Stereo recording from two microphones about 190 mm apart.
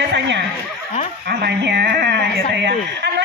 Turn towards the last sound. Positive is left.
turn(degrees=-60)  # may be behind; listen again after turning